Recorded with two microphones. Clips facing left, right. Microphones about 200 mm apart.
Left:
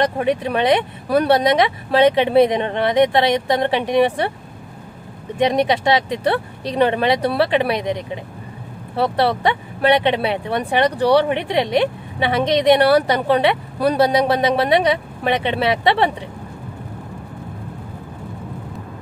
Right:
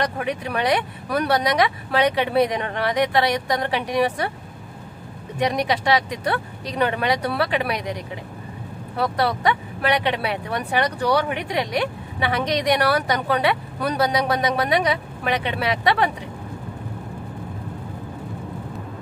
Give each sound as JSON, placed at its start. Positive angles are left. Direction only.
{"t": 0.0, "sound": "speech", "side_deg": 25}
{"t": 5.4, "sound": "speech", "side_deg": 25}